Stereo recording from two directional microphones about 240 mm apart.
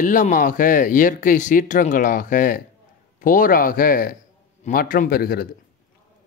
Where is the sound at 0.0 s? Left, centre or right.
Left.